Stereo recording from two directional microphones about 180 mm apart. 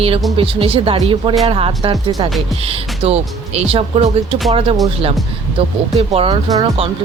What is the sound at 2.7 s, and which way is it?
Speech, 35° right (ahead or behind).